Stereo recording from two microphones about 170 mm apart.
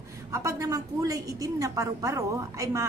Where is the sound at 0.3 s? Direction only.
15° right (ahead or behind).